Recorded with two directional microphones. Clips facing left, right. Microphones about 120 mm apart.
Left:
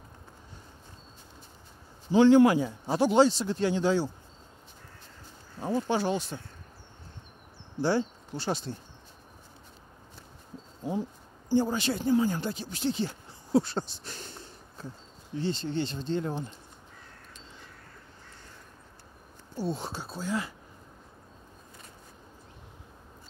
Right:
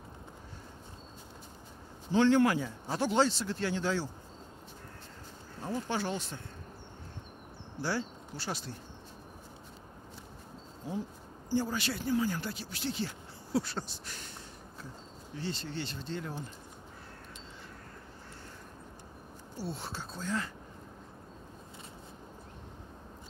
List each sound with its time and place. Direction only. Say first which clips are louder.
2.1 s speech: left 6 dB; 15° left (ahead or behind)
5.6 s speech: left 6 dB; 20° left (ahead or behind)
7.8 s speech: left 8 dB; 25° left (ahead or behind)
11.5 s speech: left 6 dB; 20° left (ahead or behind)
19.5 s speech: left 7 dB; 20° left (ahead or behind)